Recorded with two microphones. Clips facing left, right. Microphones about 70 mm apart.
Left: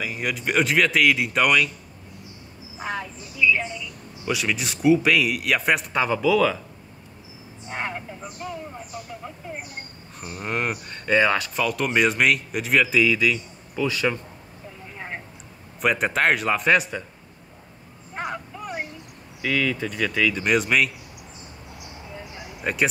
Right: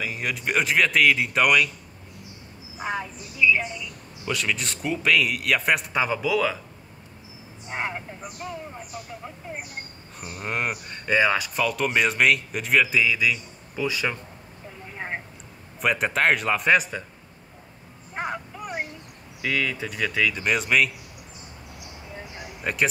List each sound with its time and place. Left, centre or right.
0.0 s speech: centre
2.8 s a sound: centre
4.3 s speech: centre
7.7 s speech: centre
10.3 s speech: centre
15.0 s vehicle: centre
15.8 s speech: centre
18.1 s vehicle: centre
19.4 s speech: centre
22.6 s speech: centre